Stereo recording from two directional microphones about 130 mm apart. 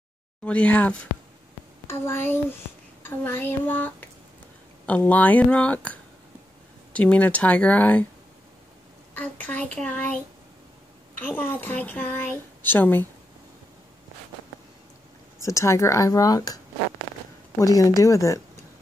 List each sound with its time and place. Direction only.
0.5 s speech: 10° left (ahead or behind)
9.1 s speech: 10° left (ahead or behind)
11.1 s speech: 15° left (ahead or behind)
15.4 s speech: 20° left (ahead or behind)